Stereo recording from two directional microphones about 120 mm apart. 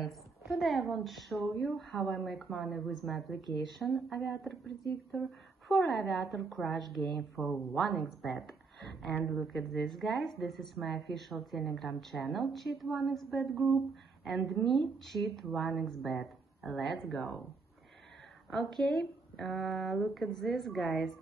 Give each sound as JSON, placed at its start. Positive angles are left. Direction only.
{"t": 0.0, "sound": "a woman's voice", "side_deg": 0}
{"t": 5.7, "sound": "a woman's voice", "side_deg": 0}
{"t": 9.2, "sound": "speech", "side_deg": 20}
{"t": 9.5, "sound": "a woman's voice", "side_deg": 0}
{"t": 18.5, "sound": "a woman's voice", "side_deg": 5}